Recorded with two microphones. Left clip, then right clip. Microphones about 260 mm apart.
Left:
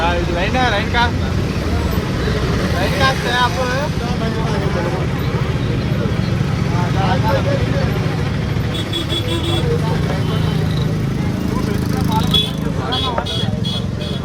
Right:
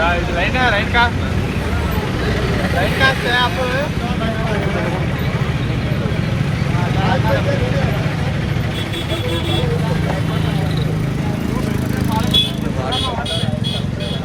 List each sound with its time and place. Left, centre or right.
0.1 s vehicle: left
3.0 s vehicle: left